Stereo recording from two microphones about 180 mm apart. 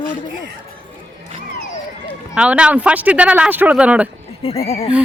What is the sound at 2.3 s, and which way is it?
Speech, 5° right (ahead or behind).